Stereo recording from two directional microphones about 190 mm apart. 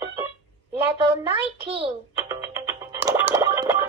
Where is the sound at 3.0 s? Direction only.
20° right (ahead or behind).